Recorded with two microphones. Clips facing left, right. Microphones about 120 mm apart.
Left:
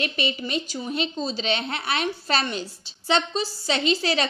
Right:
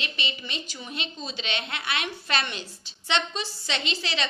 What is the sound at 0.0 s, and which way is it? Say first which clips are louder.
A woman's voice: left 8 dB; 45° left (ahead or behind).